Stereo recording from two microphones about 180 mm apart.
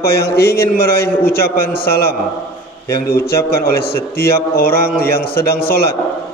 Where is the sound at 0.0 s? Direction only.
60° left (ahead or behind).